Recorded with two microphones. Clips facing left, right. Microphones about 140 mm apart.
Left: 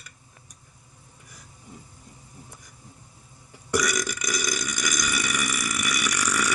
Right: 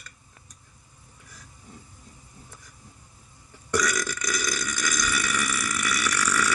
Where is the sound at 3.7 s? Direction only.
15° left (ahead or behind).